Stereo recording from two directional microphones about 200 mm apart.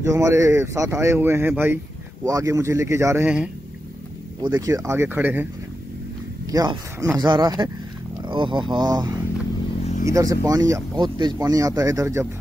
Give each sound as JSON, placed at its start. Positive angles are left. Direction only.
{"t": 0.0, "sound": "speech", "side_deg": -15}
{"t": 6.5, "sound": "speech", "side_deg": -20}